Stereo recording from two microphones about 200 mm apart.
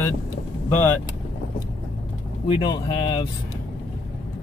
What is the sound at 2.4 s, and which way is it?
Speech, 25° left (ahead or behind).